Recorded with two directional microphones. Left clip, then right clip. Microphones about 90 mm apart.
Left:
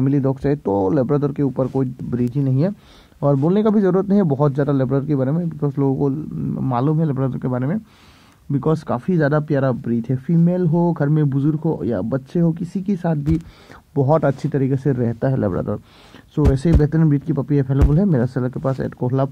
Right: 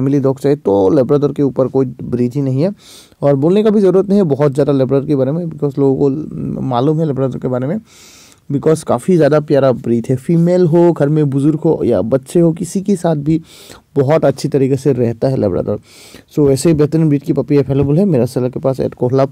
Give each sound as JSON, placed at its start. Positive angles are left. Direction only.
{"t": 0.0, "sound": "speech", "side_deg": -20}
{"t": 3.7, "sound": "speech", "side_deg": -20}
{"t": 5.3, "sound": "speech", "side_deg": -15}
{"t": 5.8, "sound": "speech", "side_deg": -25}
{"t": 8.8, "sound": "speech", "side_deg": -45}
{"t": 9.2, "sound": "speech", "side_deg": -25}
{"t": 9.8, "sound": "speech", "side_deg": -50}
{"t": 10.5, "sound": "speech", "side_deg": -45}
{"t": 11.0, "sound": "speech", "side_deg": -30}